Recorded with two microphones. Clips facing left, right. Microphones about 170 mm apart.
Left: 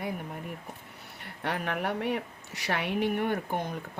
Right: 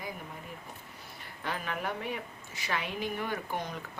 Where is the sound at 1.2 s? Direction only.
65° left (ahead or behind).